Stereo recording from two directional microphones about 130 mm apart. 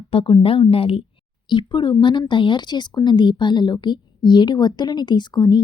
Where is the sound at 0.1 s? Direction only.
45° left (ahead or behind).